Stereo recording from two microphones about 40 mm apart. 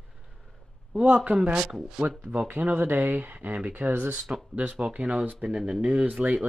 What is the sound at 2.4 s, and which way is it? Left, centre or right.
Speech, right.